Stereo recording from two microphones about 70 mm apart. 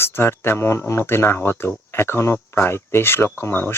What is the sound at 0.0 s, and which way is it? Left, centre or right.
Speech, left.